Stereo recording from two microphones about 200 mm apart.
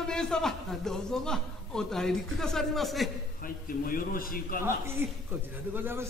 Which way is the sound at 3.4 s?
45° left (ahead or behind).